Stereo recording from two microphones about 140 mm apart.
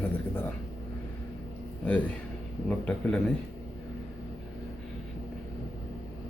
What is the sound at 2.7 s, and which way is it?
Speech, 5° left (ahead or behind).